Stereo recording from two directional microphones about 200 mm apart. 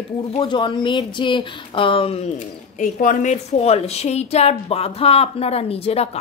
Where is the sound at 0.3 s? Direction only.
25° left (ahead or behind).